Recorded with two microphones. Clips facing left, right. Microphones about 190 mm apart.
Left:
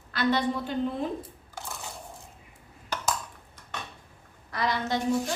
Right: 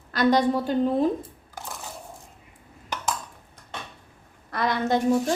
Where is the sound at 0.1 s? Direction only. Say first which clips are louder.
Right 6 dB; 40° right (ahead or behind).